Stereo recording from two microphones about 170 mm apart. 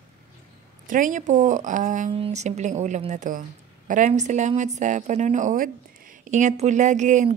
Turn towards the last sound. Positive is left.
turn(degrees=-45)  # may be behind; listen again after turning